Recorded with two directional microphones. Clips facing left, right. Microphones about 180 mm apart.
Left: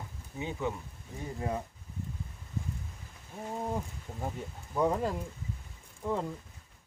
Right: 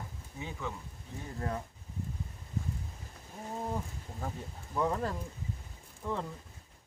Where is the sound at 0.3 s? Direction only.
20° left (ahead or behind).